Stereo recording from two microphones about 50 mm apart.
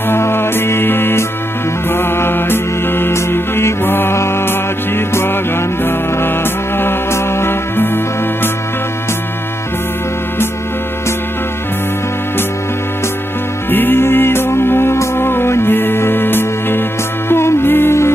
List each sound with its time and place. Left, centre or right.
0.1 s music: left
6.8 s music: left
13.7 s music: left
14.0 s music: left